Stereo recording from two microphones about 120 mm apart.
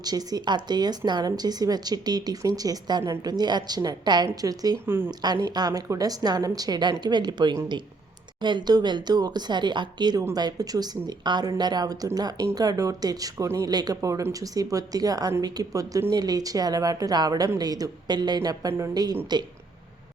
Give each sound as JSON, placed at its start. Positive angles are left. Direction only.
{"t": 0.0, "sound": "a woman's voice", "side_deg": -30}
{"t": 4.9, "sound": "a woman's voice", "side_deg": -20}
{"t": 5.2, "sound": "a woman's voice", "side_deg": -35}